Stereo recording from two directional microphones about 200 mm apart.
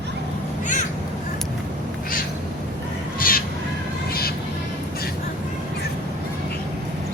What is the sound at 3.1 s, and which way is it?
Crow, 45° left (ahead or behind).